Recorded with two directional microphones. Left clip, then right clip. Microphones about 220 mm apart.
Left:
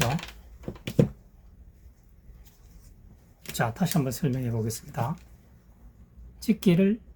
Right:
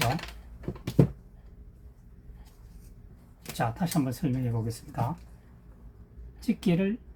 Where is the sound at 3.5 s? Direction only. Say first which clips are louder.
Left 1 dB; 60° left (ahead or behind).